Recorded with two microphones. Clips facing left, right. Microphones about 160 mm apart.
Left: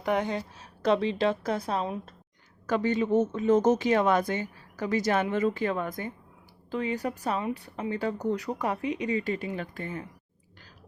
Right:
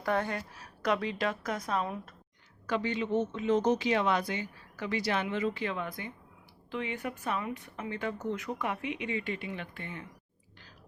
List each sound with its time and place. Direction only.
0.0 s a woman's voice: 20° left (ahead or behind)
2.6 s speech: 45° left (ahead or behind)